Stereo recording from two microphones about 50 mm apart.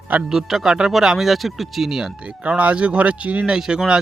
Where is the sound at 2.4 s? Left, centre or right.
Right.